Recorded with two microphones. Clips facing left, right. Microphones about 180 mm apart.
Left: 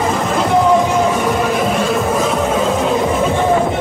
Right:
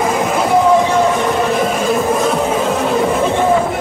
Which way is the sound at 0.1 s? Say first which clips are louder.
Right 1 dB; 10° right (ahead or behind).